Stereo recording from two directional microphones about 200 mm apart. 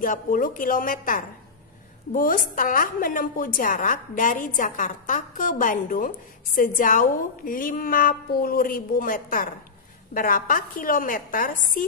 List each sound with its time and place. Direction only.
0.0 s a woman's voice: 45° left (ahead or behind)